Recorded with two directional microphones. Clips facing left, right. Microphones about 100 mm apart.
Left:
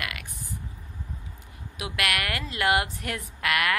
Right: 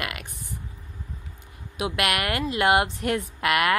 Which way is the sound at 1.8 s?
25° right (ahead or behind).